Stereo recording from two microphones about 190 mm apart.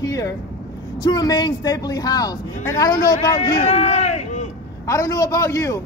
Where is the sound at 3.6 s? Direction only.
35° left (ahead or behind).